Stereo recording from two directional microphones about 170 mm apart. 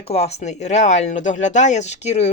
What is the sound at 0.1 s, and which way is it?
Speech, 40° left (ahead or behind).